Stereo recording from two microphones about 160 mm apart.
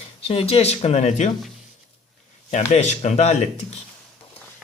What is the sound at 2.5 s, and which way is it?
Speech, 45° left (ahead or behind).